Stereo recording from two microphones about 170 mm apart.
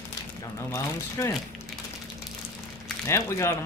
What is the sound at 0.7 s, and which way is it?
Speech, 20° left (ahead or behind).